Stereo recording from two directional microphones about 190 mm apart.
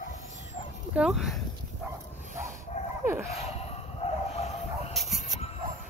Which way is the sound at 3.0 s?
10° right (ahead or behind).